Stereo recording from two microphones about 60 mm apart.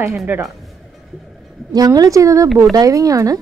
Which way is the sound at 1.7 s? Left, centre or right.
Right.